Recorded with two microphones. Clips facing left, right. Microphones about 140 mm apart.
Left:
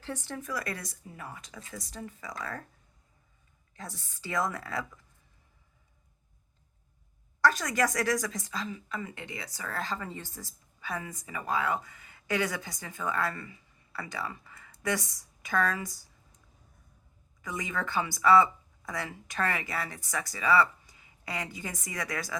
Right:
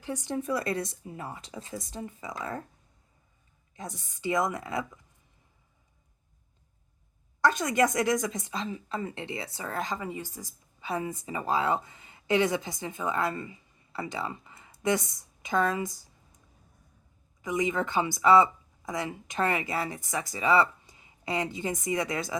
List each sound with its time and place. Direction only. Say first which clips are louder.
0.0 s speech: right 4 dB; 15° right (ahead or behind)
0.3 s a woman's voice: right 9 dB; 25° right (ahead or behind)
3.8 s a woman's voice: right 3 dB; 20° right (ahead or behind)
7.4 s a woman's voice: right 2 dB; 25° right (ahead or behind)
17.4 s a woman's voice: right 7 dB; 20° right (ahead or behind)